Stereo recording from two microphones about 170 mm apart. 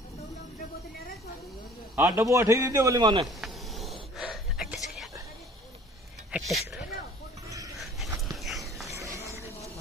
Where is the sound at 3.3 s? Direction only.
Centre (ahead or behind).